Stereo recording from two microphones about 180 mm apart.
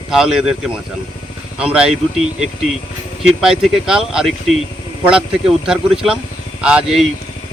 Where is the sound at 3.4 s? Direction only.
5° right (ahead or behind).